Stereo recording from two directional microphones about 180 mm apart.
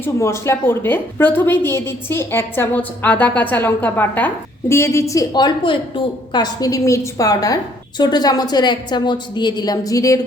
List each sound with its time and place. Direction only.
0.0 s a woman's voice: 15° left (ahead or behind)